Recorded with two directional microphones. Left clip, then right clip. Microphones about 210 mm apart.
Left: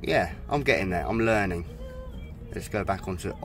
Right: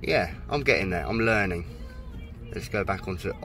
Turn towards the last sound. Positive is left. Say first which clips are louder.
# even
turn(degrees=10)  # may be behind; listen again after turning